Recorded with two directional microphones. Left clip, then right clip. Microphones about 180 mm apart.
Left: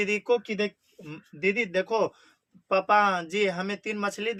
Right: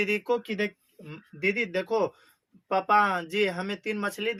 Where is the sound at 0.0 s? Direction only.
20° left (ahead or behind).